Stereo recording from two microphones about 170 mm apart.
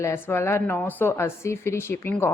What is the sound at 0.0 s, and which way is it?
A woman's voice, 15° left (ahead or behind).